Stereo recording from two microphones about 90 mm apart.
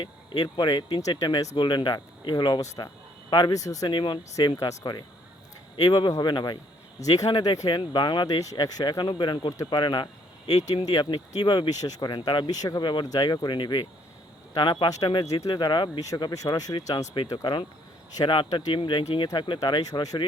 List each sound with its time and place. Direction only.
0.0 s speech: 60° left (ahead or behind)
1.5 s speech: 60° left (ahead or behind)
3.5 s speech: 40° left (ahead or behind)
3.8 s speech: 60° left (ahead or behind)
4.8 s speech: 50° left (ahead or behind)
8.4 s speech: 45° left (ahead or behind); by 10.8 s 75° left (ahead or behind)
10.8 s speech: 50° left (ahead or behind)
11.8 s speech: 45° left (ahead or behind)
13.1 s speech: 45° left (ahead or behind)
15.3 s speech: 40° left (ahead or behind)
15.7 s speech: 55° left (ahead or behind)
16.0 s speech: 40° left (ahead or behind)
17.3 s speech: 60° left (ahead or behind); by 20.2 s 45° left (ahead or behind)